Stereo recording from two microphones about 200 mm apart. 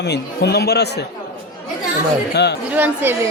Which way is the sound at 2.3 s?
55° left (ahead or behind).